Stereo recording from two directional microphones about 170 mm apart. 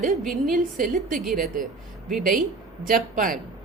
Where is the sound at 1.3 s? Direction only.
55° right (ahead or behind).